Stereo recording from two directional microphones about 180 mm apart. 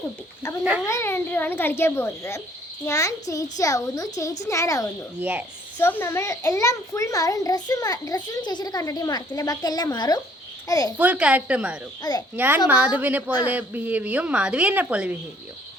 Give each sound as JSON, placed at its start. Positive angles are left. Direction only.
{"t": 0.9, "sound": "a child's voice", "side_deg": 15}
{"t": 5.2, "sound": "a woman's voice", "side_deg": -10}
{"t": 5.8, "sound": "a child's voice", "side_deg": 10}
{"t": 10.9, "sound": "a woman's voice", "side_deg": -10}
{"t": 12.1, "sound": "a child's voice", "side_deg": 20}
{"t": 12.4, "sound": "a woman's voice", "side_deg": -10}